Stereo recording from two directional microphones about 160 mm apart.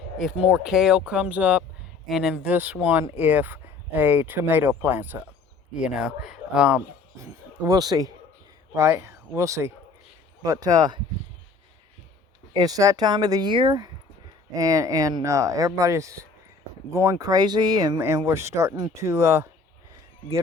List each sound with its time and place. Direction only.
0.2 s speech: 5° right (ahead or behind)
7.2 s speech: 20° right (ahead or behind)
12.5 s speech: 25° right (ahead or behind)